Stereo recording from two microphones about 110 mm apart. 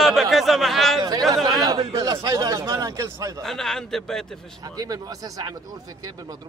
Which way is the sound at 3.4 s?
5° left (ahead or behind).